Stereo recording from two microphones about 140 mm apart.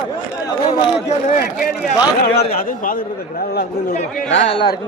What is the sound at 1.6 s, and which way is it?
A man's voice, 90° left.